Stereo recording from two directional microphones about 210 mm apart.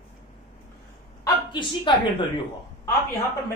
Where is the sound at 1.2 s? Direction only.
20° left (ahead or behind).